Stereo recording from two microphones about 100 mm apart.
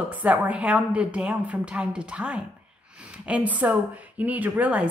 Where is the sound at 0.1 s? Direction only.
15° right (ahead or behind).